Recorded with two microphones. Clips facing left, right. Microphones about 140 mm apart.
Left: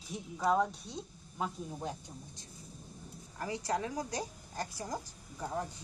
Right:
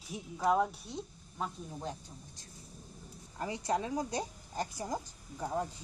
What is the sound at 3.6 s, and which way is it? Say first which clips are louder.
A woman's voice: right 3 dB; 20° right (ahead or behind).